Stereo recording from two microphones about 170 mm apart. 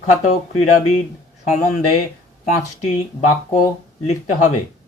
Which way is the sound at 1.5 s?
40° left (ahead or behind).